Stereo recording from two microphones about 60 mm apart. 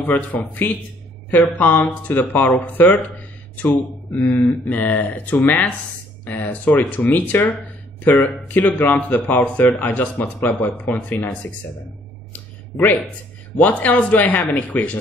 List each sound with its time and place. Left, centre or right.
0.0 s speech: left
12.3 s a sound: left
13.6 s speech: left